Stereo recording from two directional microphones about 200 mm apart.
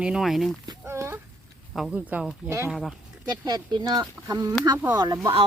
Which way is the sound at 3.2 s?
20° right (ahead or behind).